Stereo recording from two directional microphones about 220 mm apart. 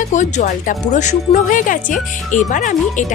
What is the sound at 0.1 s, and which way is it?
Speech, 35° left (ahead or behind).